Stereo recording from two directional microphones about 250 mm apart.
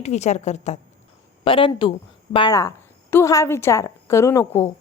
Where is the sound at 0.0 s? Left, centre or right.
Left.